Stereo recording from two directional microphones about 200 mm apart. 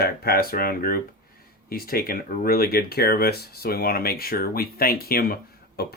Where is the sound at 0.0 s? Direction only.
50° left (ahead or behind).